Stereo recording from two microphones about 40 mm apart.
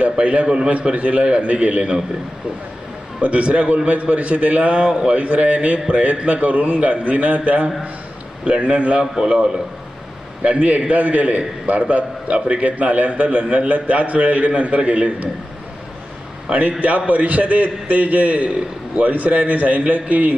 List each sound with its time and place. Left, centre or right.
0.2 s a man's voice: right
3.2 s a man's voice: right
9.0 s a man's voice: centre
9.3 s a man's voice: right
10.4 s a man's voice: right
16.8 s a man's voice: right